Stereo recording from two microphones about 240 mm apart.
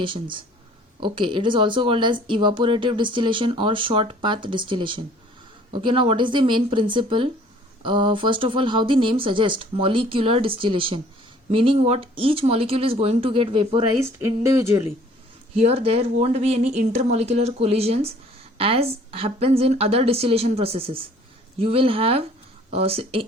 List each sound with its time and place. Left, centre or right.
0.0 s speech: right
14.0 s a sound: centre
15.5 s speech: right